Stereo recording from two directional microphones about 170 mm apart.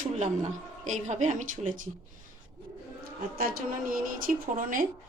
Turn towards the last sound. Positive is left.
turn(degrees=-55)  # may be behind; listen again after turning